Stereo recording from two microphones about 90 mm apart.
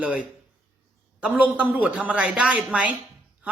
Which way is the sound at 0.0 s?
15° right (ahead or behind).